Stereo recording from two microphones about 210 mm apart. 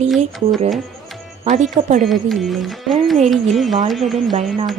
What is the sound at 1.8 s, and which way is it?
Speech, 35° right (ahead or behind).